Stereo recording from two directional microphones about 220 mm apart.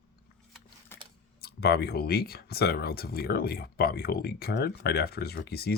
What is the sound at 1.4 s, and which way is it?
Speech, 45° left (ahead or behind).